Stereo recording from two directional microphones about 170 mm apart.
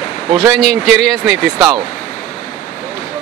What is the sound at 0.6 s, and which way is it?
Speech, centre (ahead or behind).